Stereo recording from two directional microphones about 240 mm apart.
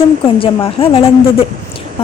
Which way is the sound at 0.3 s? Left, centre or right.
Left.